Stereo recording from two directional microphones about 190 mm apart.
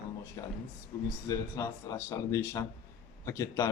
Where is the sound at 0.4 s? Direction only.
15° left (ahead or behind).